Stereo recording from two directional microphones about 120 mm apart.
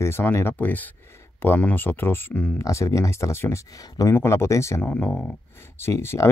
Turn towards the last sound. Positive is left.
turn(degrees=20)  # may be behind; listen again after turning